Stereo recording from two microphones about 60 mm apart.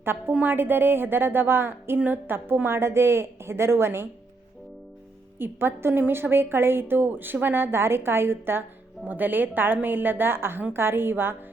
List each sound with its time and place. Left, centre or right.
0.0 s a woman's voice: right
5.4 s a woman's voice: right